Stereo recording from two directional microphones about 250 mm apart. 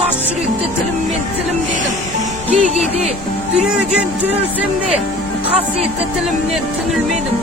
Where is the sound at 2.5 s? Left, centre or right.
Right.